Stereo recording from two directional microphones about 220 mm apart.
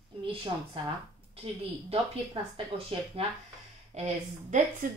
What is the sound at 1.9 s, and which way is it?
Speech, 25° right (ahead or behind).